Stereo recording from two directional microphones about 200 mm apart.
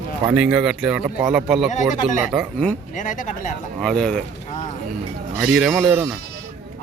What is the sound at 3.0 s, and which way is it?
Speech, 40° left (ahead or behind).